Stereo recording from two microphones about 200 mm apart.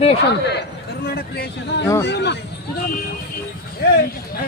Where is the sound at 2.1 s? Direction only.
60° left (ahead or behind).